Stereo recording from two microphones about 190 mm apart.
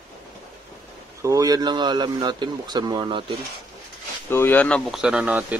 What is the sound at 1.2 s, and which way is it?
Speech, 20° right (ahead or behind).